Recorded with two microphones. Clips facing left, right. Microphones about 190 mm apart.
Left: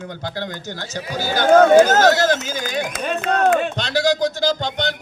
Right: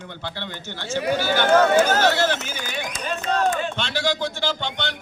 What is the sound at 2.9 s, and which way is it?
Speech, 65° left (ahead or behind).